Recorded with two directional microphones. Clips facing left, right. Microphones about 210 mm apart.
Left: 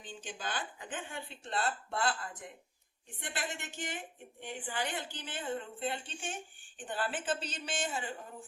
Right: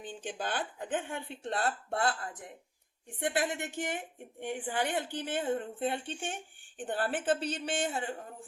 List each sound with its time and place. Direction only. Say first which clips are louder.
0.0 s a woman's voice: right 5 dB; 60° right (ahead or behind)
3.2 s a woman's voice: right 9 dB; 55° right (ahead or behind)